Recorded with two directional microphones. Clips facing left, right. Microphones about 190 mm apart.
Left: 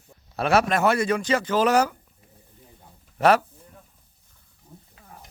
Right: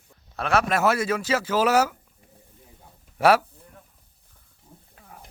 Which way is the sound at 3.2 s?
10° right (ahead or behind).